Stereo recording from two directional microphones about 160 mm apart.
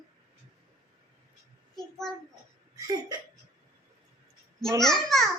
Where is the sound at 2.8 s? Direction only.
25° right (ahead or behind).